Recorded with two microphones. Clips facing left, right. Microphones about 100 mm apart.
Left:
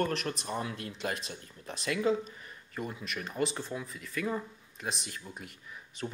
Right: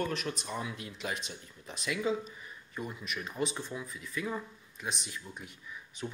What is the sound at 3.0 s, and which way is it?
Speech, centre (ahead or behind).